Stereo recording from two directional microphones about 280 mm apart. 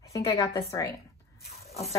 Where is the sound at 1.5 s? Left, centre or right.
Left.